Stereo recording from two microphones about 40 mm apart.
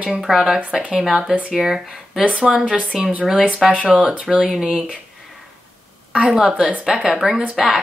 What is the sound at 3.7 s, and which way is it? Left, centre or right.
Speech, right.